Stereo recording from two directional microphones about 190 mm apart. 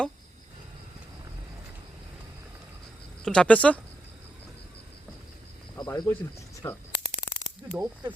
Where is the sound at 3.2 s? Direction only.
5° left (ahead or behind).